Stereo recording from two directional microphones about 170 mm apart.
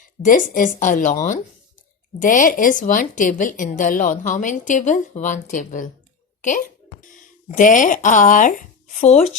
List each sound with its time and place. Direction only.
0.3 s a woman's voice: 50° left (ahead or behind)